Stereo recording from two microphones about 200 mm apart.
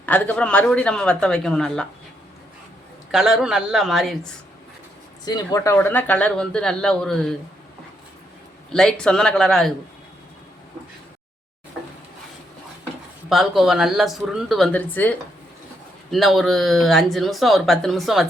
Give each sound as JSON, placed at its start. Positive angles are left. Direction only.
{"t": 0.0, "sound": "speech", "side_deg": 5}
{"t": 3.1, "sound": "speech", "side_deg": 0}
{"t": 5.2, "sound": "speech", "side_deg": 20}
{"t": 8.7, "sound": "speech", "side_deg": 0}
{"t": 13.3, "sound": "speech", "side_deg": 0}
{"t": 16.1, "sound": "speech", "side_deg": 0}